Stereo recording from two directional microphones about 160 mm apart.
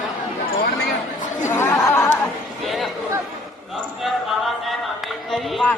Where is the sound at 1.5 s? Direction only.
15° left (ahead or behind).